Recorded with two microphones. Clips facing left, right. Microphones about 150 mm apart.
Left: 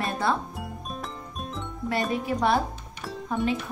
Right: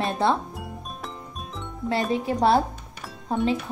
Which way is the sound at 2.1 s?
30° right (ahead or behind).